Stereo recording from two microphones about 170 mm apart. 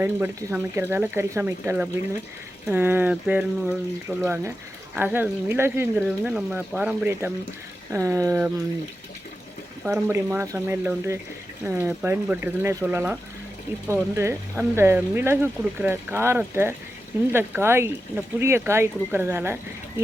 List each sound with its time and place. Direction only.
0.0 s speech: 15° right (ahead or behind)
9.8 s speech: 10° right (ahead or behind)